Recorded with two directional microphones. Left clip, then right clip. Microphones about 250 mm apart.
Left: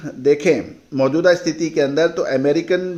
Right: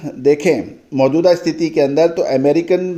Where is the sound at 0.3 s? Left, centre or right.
Centre.